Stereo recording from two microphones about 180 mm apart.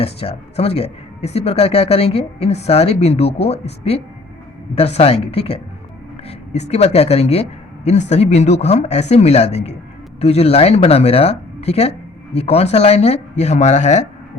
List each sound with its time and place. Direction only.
0.0 s speech: 35° left (ahead or behind)